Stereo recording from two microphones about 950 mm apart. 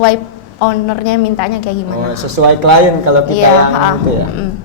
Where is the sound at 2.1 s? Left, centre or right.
Right.